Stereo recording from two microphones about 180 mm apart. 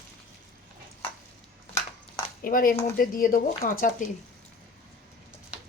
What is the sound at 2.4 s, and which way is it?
Speech, 50° left (ahead or behind).